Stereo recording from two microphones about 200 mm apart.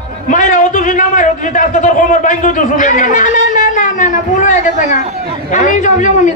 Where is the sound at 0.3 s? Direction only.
40° left (ahead or behind).